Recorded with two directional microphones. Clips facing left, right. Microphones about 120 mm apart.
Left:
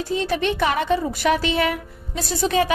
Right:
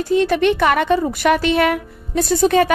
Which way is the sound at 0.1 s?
60° right (ahead or behind).